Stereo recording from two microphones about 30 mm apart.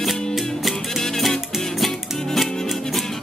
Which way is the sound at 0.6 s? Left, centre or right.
Centre.